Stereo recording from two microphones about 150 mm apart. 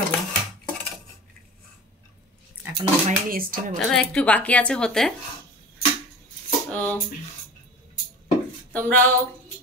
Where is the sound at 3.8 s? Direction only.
5° left (ahead or behind).